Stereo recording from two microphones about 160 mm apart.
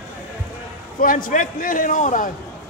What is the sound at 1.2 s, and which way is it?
A man's voice, 55° left (ahead or behind).